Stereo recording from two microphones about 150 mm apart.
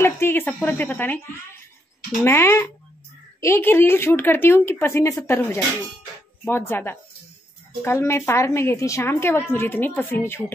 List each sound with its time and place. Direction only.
0.0 s a woman's voice: 15° left (ahead or behind)
2.2 s a woman's voice: 15° left (ahead or behind)